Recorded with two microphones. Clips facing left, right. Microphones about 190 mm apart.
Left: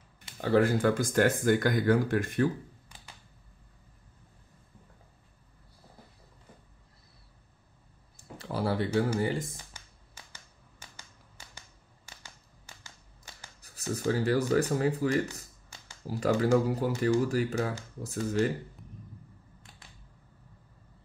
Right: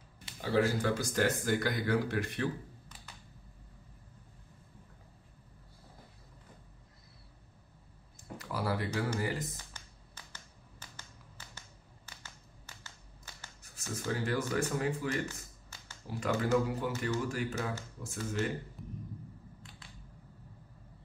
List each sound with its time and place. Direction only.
0.4 s speech: 55° left (ahead or behind)
8.4 s speech: 30° left (ahead or behind)
12.2 s a sound: 15° left (ahead or behind)
13.6 s speech: 35° left (ahead or behind)